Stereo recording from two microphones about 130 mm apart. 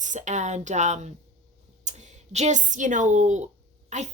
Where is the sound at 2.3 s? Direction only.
65° right (ahead or behind).